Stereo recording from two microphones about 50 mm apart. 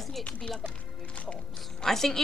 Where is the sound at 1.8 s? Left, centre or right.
Centre.